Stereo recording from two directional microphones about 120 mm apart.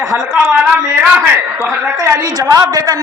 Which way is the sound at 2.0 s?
25° right (ahead or behind).